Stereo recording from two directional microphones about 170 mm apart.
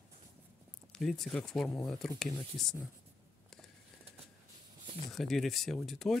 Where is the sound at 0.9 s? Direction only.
Centre (ahead or behind).